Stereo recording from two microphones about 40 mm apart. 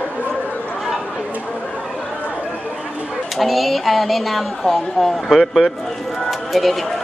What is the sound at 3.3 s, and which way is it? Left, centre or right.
A woman's voice, centre.